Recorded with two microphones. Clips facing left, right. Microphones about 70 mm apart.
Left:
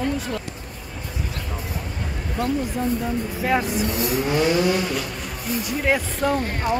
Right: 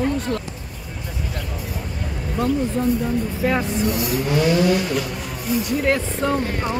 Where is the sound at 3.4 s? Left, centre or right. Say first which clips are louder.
Right 1 dB; centre.